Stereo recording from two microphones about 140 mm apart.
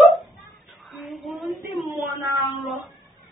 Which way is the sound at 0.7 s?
Centre (ahead or behind).